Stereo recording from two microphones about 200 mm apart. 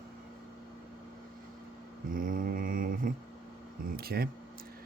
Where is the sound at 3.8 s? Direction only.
50° right (ahead or behind).